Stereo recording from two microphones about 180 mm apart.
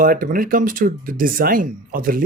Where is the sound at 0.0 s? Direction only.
50° right (ahead or behind).